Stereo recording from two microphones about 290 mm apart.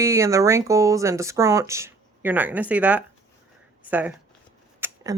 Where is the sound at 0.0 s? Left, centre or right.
Centre.